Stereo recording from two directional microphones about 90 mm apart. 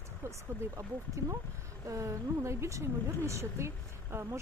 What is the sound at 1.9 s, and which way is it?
A woman's voice, 35° right (ahead or behind).